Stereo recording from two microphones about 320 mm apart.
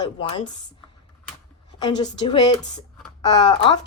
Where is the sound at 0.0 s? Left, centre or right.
Centre.